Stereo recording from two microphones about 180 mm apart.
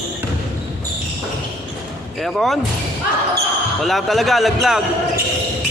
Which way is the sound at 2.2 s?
Centre (ahead or behind).